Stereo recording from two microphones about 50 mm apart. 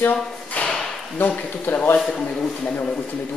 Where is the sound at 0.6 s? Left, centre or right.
Left.